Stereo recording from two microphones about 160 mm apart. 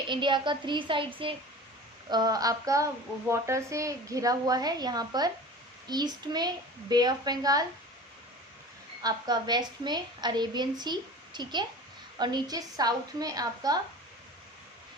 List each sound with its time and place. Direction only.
0.1 s speech: 30° right (ahead or behind)
9.0 s speech: 25° right (ahead or behind)